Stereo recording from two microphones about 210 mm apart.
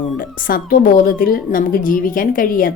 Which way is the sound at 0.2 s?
45° left (ahead or behind).